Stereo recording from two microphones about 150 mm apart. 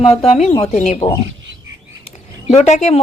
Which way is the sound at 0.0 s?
40° left (ahead or behind).